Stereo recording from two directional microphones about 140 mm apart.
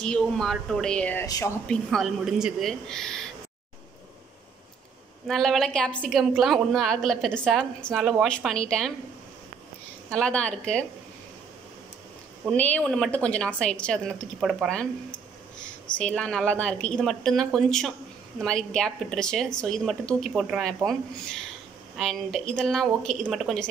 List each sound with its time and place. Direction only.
0.0 s a woman's voice: 5° left (ahead or behind)
1.2 s speech: 25° left (ahead or behind)
1.7 s a woman's voice: centre (ahead or behind)
5.2 s a woman's voice: centre (ahead or behind)
10.1 s a woman's voice: 5° left (ahead or behind)
12.4 s a woman's voice: 10° left (ahead or behind)